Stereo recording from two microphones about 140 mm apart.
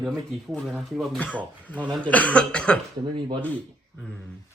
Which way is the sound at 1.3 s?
10° left (ahead or behind).